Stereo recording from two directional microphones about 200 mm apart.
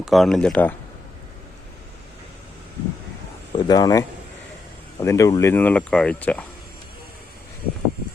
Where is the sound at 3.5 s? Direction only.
20° left (ahead or behind).